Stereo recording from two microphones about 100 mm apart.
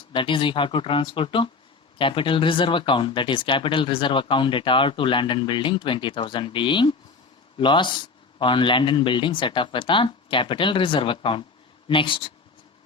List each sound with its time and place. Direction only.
0.1 s speech: 55° left (ahead or behind)